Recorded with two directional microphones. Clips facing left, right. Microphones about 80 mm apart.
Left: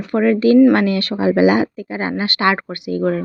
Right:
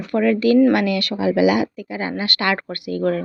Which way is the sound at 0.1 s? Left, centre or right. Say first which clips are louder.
Left 3 dB; left.